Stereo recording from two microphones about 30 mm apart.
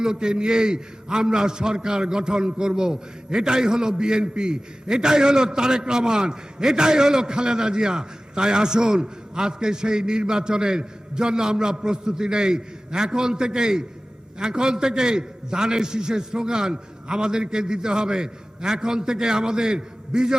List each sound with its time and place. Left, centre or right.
0.0 s a man's voice: right